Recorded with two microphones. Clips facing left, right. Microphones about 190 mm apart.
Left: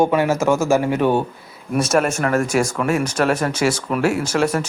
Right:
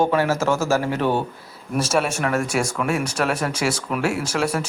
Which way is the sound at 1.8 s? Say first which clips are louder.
Left 3 dB; 5° right (ahead or behind).